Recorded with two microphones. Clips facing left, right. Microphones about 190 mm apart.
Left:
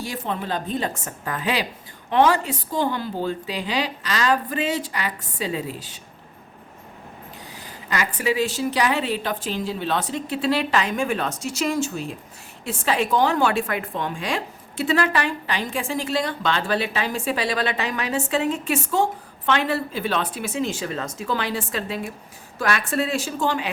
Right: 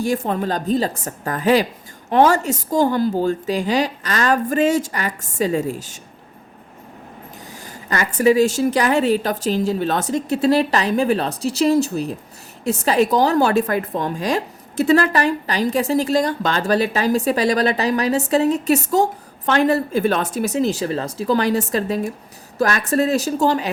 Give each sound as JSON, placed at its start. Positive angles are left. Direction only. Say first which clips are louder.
{"t": 0.0, "sound": "a woman's voice", "louder": "right 8 dB", "side_deg": -50}
{"t": 7.5, "sound": "a woman's voice", "louder": "right 3 dB", "side_deg": -45}